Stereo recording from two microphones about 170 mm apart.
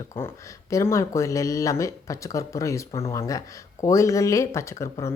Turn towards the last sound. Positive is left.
turn(degrees=15)  # may be behind; listen again after turning